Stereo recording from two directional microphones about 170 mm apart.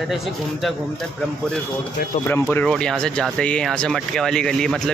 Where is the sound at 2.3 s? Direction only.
10° left (ahead or behind).